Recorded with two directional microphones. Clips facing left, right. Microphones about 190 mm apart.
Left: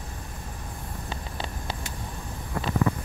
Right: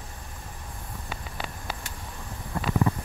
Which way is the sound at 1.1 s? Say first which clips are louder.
Left 1 dB; 25° left (ahead or behind).